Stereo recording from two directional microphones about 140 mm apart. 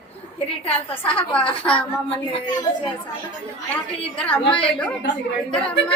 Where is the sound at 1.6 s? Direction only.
15° left (ahead or behind).